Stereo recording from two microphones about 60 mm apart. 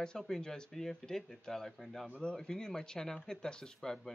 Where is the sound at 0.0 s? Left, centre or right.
Centre.